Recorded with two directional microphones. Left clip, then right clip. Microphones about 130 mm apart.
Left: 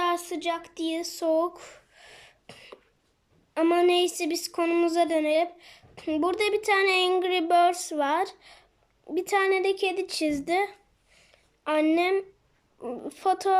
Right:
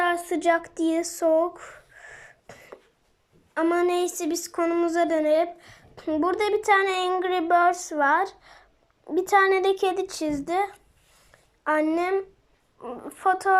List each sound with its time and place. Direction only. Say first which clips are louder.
0.0 s speech: right 4 dB; 20° left (ahead or behind)
1.2 s a sound: right 3 dB; 20° left (ahead or behind)
3.5 s a woman's voice: left 1 dB; 20° left (ahead or behind)
11.3 s a sound: right 3 dB; 10° left (ahead or behind)
11.9 s speech: left 1 dB; 20° left (ahead or behind)
12.8 s a woman's voice: right 3 dB; 35° left (ahead or behind)